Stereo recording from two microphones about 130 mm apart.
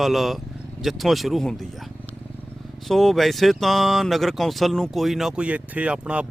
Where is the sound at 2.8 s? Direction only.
Centre (ahead or behind).